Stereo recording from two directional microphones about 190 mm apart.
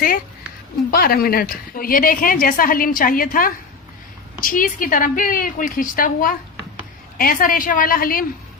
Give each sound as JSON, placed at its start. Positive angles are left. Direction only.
{"t": 0.9, "sound": "a woman's voice", "side_deg": 50}